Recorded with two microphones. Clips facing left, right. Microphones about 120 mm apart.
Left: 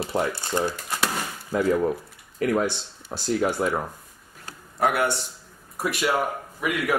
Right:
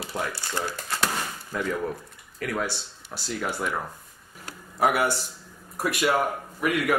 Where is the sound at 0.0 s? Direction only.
30° left (ahead or behind).